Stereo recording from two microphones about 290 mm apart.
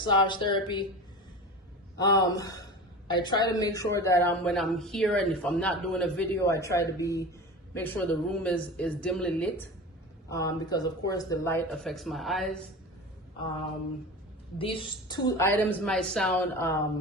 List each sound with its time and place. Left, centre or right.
0.0 s speech: centre
2.0 s a woman's voice: centre
14.6 s speech: centre